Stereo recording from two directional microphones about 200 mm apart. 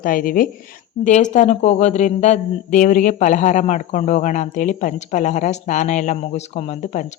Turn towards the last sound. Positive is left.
turn(degrees=35)  # may be behind; listen again after turning